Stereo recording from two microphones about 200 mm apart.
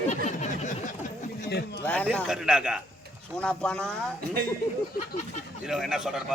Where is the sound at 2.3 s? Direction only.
5° right (ahead or behind).